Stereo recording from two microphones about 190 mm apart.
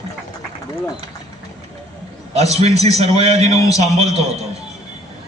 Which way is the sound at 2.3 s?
35° right (ahead or behind).